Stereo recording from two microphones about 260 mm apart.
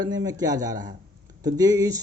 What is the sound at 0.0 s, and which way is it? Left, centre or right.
Speech, centre.